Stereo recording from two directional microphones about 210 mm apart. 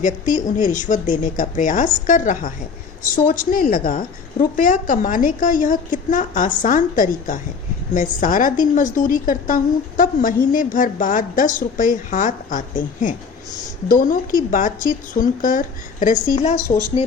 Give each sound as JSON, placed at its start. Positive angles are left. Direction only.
{"t": 0.0, "sound": "a woman's voice", "side_deg": 35}